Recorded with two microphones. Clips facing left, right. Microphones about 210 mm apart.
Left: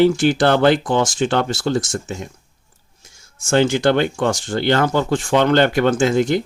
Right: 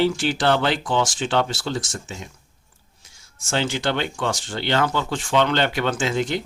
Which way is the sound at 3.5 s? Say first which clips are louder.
Left 8 dB; 50° left (ahead or behind).